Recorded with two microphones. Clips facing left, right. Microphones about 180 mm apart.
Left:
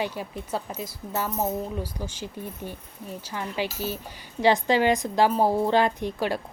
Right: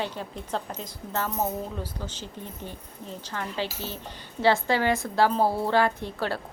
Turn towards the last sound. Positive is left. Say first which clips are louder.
# left 3 dB
turn(degrees=15)  # may be behind; listen again after turning